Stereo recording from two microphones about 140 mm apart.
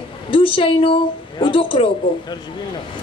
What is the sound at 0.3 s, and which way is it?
A woman's voice, 40° left (ahead or behind).